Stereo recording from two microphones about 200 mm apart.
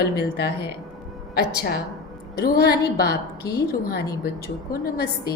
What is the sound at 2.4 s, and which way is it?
A woman's voice, 55° left (ahead or behind).